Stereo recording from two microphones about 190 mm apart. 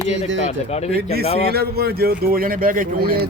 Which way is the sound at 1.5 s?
55° right (ahead or behind).